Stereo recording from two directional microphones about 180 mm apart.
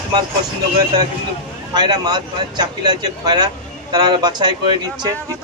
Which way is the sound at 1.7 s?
20° right (ahead or behind).